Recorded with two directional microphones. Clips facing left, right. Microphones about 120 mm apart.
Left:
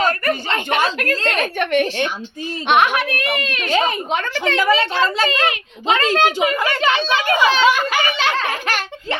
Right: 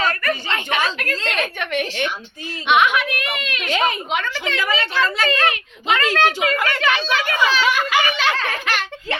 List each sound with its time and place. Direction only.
0.0 s a sound: 35° left (ahead or behind)
0.9 s a woman's voice: 45° left (ahead or behind)
1.7 s a child's voice: 35° left (ahead or behind)
4.5 s a child's voice: 25° left (ahead or behind)
6.1 s a woman's voice: 15° left (ahead or behind)